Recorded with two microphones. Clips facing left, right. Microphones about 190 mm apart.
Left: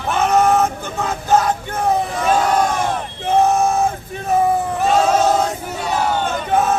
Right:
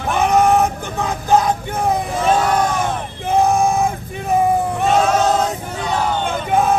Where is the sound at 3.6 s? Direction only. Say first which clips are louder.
Even; 15° right (ahead or behind).